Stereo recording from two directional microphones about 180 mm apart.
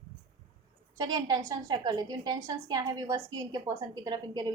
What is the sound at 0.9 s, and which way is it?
A woman's voice, 20° right (ahead or behind).